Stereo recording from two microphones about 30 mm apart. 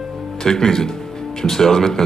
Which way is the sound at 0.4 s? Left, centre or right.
Centre.